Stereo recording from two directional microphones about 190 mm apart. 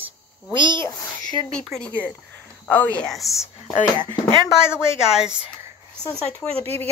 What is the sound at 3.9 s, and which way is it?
Speech, 25° left (ahead or behind).